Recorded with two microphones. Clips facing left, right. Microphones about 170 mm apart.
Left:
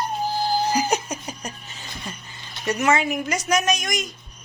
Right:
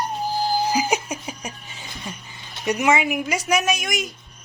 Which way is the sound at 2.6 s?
15° right (ahead or behind).